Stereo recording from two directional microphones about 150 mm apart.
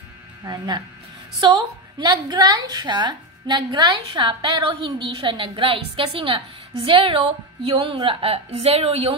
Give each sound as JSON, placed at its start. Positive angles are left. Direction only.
{"t": 0.5, "sound": "a woman's voice", "side_deg": -25}